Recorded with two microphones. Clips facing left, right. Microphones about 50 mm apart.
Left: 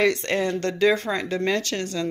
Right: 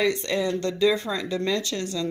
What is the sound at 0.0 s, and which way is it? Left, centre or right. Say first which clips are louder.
Speech: left 2 dB; left.